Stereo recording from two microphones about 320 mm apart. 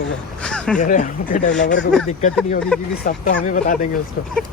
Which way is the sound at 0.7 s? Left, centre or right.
Left.